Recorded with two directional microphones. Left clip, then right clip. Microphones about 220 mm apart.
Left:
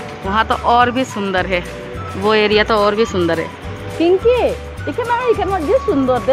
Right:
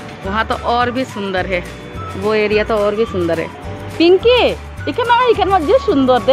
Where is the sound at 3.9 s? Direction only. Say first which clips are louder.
Right 3 dB; 25° right (ahead or behind).